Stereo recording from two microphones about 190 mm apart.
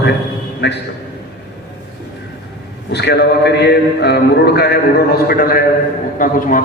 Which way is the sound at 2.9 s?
60° left (ahead or behind).